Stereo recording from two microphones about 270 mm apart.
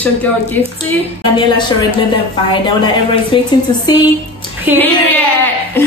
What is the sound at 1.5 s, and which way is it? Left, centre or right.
Speech, centre.